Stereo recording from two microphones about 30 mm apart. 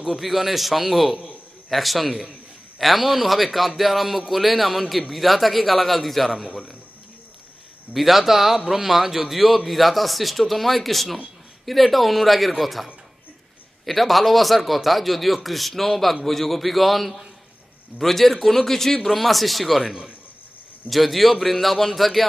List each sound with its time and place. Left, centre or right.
0.2 s speech: centre
6.4 s a man's voice: right
7.9 s speech: centre
20.9 s speech: centre